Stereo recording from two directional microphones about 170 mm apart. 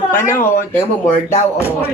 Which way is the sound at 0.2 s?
15° left (ahead or behind).